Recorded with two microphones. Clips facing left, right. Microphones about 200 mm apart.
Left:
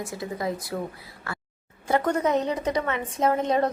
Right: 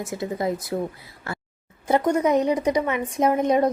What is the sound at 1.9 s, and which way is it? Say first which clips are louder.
A woman's voice: right 3 dB; 15° right (ahead or behind).